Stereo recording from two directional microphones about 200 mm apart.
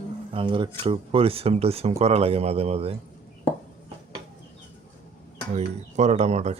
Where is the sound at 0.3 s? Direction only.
25° right (ahead or behind).